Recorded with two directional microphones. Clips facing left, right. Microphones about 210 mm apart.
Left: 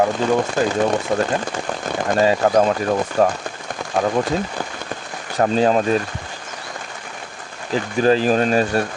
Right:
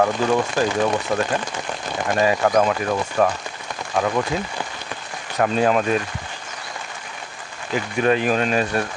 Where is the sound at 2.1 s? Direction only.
30° left (ahead or behind).